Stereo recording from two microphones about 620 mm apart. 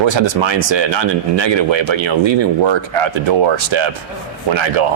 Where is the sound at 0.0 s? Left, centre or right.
Right.